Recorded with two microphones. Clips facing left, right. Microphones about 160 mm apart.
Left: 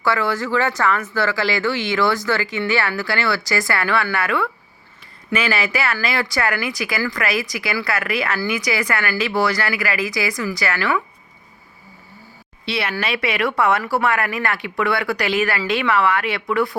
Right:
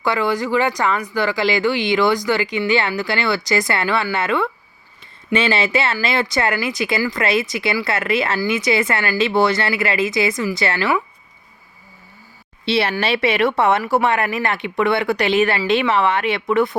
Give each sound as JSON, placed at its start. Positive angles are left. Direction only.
{"t": 0.0, "sound": "speech", "side_deg": -20}
{"t": 12.6, "sound": "speech", "side_deg": -30}